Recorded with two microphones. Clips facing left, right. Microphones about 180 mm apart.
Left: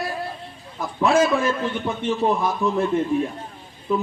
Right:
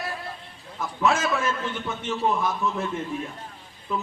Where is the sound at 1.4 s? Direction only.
30° left (ahead or behind).